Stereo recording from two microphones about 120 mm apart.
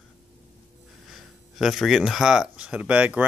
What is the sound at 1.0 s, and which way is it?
Speech, centre (ahead or behind).